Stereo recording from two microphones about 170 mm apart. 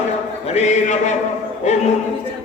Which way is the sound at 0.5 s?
45° left (ahead or behind).